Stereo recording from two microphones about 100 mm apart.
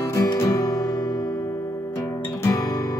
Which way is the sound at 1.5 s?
25° left (ahead or behind).